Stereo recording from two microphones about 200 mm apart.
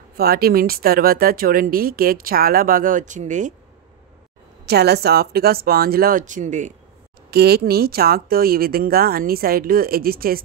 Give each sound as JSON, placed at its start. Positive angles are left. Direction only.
{"t": 0.2, "sound": "speech", "side_deg": -50}
{"t": 4.6, "sound": "speech", "side_deg": -55}
{"t": 7.2, "sound": "speech", "side_deg": -50}